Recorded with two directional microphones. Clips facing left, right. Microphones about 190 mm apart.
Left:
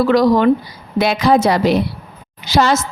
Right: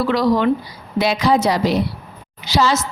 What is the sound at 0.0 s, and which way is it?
A woman's voice, 45° left (ahead or behind).